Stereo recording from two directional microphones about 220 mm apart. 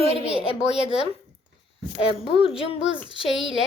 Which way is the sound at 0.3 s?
5° right (ahead or behind).